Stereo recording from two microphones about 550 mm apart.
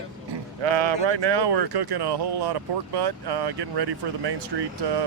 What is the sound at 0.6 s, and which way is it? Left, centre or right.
Speech, right.